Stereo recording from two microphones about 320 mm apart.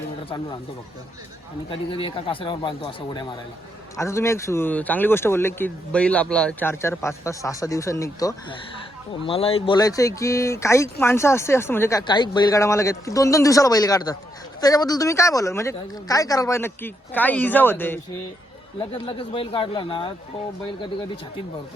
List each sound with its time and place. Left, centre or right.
1.7 s speech: centre